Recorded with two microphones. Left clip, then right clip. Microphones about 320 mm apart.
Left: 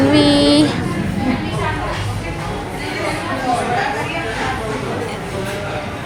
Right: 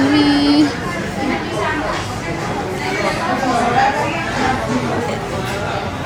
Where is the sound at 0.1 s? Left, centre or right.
Left.